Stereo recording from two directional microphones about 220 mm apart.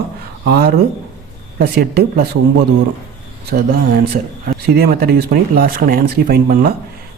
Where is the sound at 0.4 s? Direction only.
40° right (ahead or behind).